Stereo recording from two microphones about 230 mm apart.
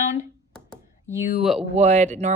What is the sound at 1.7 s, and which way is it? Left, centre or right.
Speech, right.